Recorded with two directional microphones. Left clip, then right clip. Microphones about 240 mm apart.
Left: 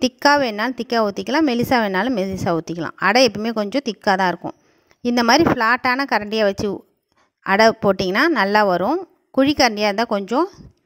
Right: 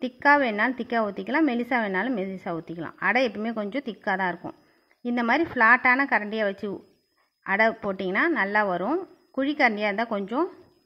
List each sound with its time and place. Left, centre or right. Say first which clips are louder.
0.0 s a woman's voice: left 5 dB; left